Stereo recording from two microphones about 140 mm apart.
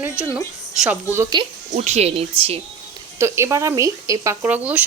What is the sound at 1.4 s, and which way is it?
Speech, 35° right (ahead or behind).